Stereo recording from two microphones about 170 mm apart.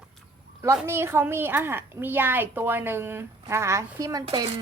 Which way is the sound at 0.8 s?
15° right (ahead or behind).